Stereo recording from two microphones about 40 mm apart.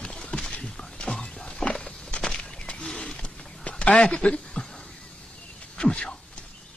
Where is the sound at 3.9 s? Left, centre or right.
Centre.